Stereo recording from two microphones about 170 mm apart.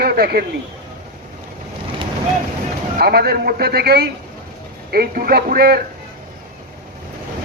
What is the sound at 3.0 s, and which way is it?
Speech, 70° right (ahead or behind).